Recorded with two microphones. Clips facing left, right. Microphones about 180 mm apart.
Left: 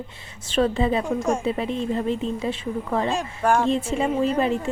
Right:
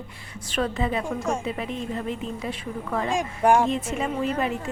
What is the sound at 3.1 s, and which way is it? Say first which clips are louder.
Speech: right 5 dB; 15° right (ahead or behind).